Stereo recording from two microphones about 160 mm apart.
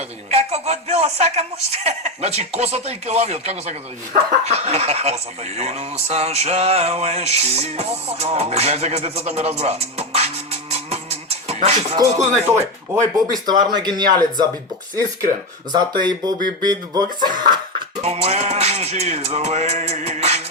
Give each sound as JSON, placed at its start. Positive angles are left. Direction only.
{"t": 0.3, "sound": "music", "side_deg": -40}
{"t": 2.6, "sound": "speech", "side_deg": -40}
{"t": 11.9, "sound": "speech", "side_deg": -15}
{"t": 13.4, "sound": "speech", "side_deg": -25}
{"t": 15.7, "sound": "speech", "side_deg": -25}
{"t": 18.0, "sound": "music", "side_deg": -40}